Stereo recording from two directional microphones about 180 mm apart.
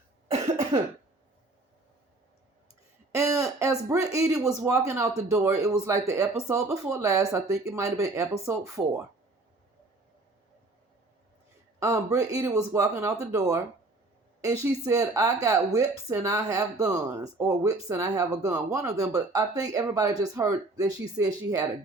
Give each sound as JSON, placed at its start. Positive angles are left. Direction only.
{"t": 0.7, "sound": "speech", "side_deg": -25}
{"t": 3.1, "sound": "speech", "side_deg": -20}
{"t": 11.8, "sound": "speech", "side_deg": -20}